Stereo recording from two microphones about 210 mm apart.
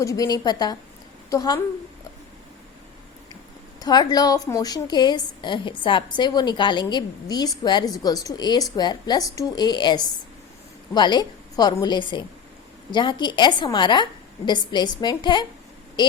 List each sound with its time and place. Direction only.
0.0 s a woman's voice: 15° left (ahead or behind)
3.8 s a woman's voice: 20° left (ahead or behind)